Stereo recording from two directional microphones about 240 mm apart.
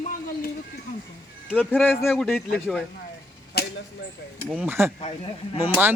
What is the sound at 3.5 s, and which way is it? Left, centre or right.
Arrow, left.